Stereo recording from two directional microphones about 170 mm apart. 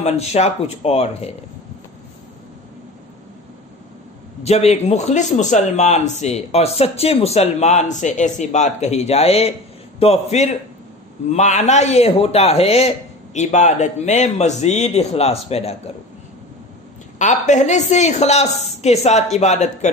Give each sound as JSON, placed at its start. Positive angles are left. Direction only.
{"t": 0.0, "sound": "a man's voice", "side_deg": 40}
{"t": 4.4, "sound": "a man's voice", "side_deg": 40}
{"t": 17.2, "sound": "a man's voice", "side_deg": 45}